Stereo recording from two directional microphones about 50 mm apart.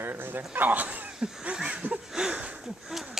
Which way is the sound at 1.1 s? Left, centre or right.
Centre.